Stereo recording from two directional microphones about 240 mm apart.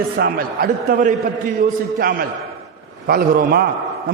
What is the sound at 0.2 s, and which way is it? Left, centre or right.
A man's voice, right.